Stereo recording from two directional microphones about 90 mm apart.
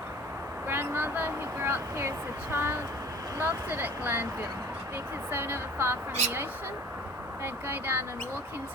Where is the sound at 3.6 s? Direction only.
25° right (ahead or behind).